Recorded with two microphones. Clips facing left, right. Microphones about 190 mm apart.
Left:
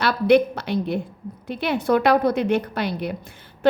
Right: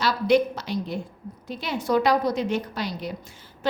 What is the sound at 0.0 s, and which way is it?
A woman's voice, 60° left (ahead or behind).